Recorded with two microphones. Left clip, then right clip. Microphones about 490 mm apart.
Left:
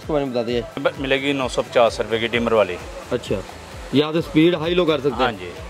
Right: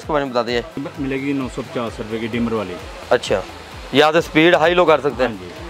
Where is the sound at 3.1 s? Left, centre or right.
Right.